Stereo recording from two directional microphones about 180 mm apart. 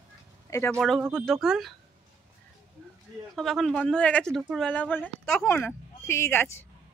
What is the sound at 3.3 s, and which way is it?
A woman's voice, centre (ahead or behind).